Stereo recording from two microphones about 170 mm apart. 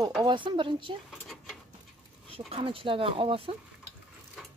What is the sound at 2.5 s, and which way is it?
Speech, 30° right (ahead or behind).